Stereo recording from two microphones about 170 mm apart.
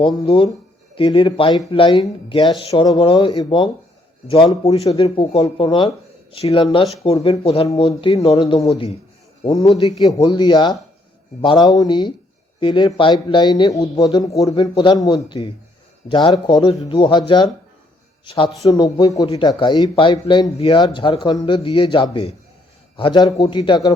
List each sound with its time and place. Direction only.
0.0 s a man's voice: 30° left (ahead or behind)
10.0 s a man's voice: 20° left (ahead or behind)